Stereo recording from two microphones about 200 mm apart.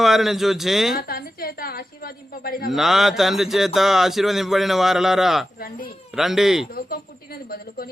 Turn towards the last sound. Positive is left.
turn(degrees=50)  # may be behind; listen again after turning